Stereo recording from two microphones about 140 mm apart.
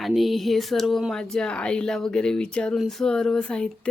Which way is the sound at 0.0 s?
Centre (ahead or behind).